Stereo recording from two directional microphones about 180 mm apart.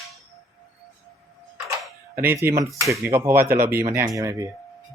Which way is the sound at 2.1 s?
15° right (ahead or behind).